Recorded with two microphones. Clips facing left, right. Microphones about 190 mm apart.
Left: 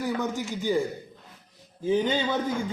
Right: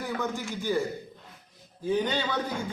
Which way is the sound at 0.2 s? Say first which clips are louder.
Left 3 dB; 15° left (ahead or behind).